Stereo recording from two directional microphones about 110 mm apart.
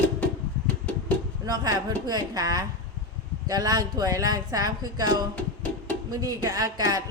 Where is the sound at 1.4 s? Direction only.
35° right (ahead or behind).